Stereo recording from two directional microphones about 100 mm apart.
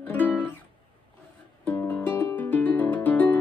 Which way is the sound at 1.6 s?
15° left (ahead or behind).